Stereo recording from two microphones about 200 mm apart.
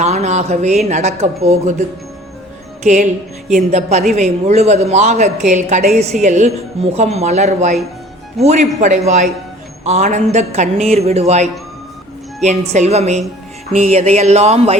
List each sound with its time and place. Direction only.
0.0 s speech: 35° right (ahead or behind)
2.8 s speech: 35° right (ahead or behind)